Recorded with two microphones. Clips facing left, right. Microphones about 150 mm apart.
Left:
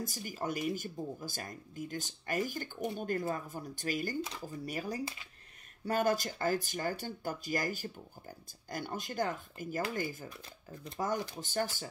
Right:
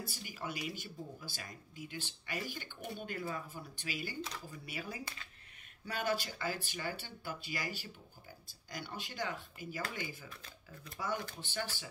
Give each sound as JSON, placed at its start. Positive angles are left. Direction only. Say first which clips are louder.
{"t": 0.0, "sound": "speech", "louder": "left 6 dB", "side_deg": 45}
{"t": 5.0, "sound": "speech", "louder": "left 7 dB", "side_deg": 20}
{"t": 5.9, "sound": "speech", "louder": "left 6 dB", "side_deg": 45}
{"t": 11.3, "sound": "speech", "louder": "left 7 dB", "side_deg": 45}